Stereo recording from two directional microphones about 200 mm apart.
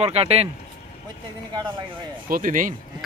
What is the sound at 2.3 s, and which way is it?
Speech, 40° right (ahead or behind).